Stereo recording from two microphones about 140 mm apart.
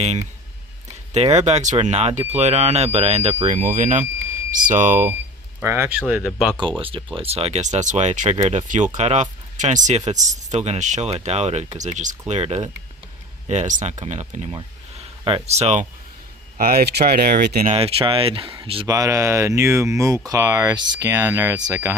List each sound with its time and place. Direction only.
0.0 s speech: 50° right (ahead or behind)
3.4 s speech: 70° right (ahead or behind)
5.6 s speech: 15° right (ahead or behind)
6.0 s speech: 5° right (ahead or behind)
6.6 s speech: 35° right (ahead or behind); by 12.1 s 60° right (ahead or behind)
12.3 s speech: 50° right (ahead or behind)
16.6 s speech: 90° right
17.7 s speech: 45° right (ahead or behind)
18.9 s speech: 20° right (ahead or behind)